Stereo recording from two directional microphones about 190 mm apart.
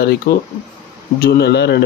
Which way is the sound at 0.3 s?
55° left (ahead or behind).